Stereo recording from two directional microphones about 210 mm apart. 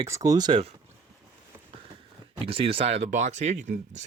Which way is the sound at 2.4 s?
25° right (ahead or behind).